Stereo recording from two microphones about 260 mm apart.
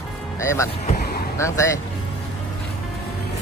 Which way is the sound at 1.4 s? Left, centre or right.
Centre.